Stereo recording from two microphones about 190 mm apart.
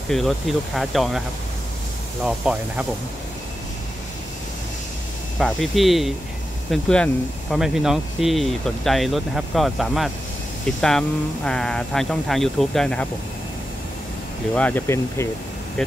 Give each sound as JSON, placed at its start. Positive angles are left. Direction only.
{"t": 0.1, "sound": "speech", "side_deg": 0}
{"t": 2.2, "sound": "speech", "side_deg": -5}
{"t": 5.4, "sound": "speech", "side_deg": 0}
{"t": 14.5, "sound": "speech", "side_deg": 10}